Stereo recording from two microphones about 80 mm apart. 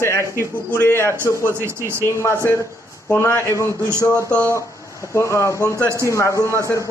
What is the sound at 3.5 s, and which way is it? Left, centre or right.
Speech, right.